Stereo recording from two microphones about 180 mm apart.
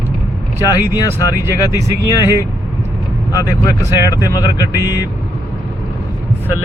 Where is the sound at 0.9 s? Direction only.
20° left (ahead or behind).